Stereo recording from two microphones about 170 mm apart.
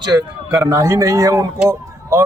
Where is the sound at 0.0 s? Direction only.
25° right (ahead or behind).